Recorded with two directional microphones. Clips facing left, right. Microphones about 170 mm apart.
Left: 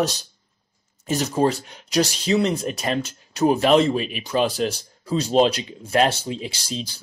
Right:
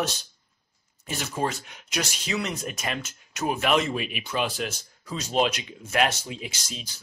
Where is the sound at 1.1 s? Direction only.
35° left (ahead or behind).